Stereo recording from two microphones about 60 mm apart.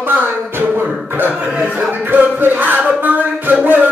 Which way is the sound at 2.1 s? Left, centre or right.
Right.